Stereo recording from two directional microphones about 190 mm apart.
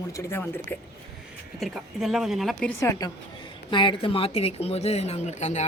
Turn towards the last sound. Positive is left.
turn(degrees=35)  # may be behind; listen again after turning